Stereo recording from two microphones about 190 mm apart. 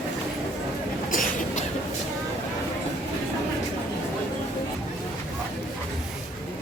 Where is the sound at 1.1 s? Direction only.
45° left (ahead or behind).